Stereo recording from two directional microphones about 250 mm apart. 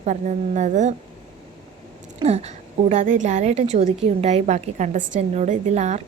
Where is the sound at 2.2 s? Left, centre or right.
Right.